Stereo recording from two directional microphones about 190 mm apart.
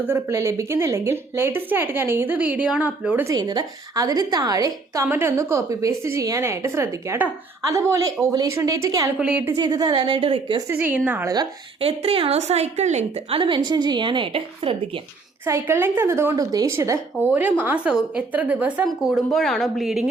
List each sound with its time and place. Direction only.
0.1 s a woman's voice: 15° right (ahead or behind)
3.3 s a woman's voice: 20° right (ahead or behind)
9.1 s a woman's voice: 5° right (ahead or behind); by 10.6 s 30° right (ahead or behind)
10.7 s a woman's voice: 10° right (ahead or behind)
11.8 s a woman's voice: 30° right (ahead or behind)
15.4 s a woman's voice: 15° right (ahead or behind)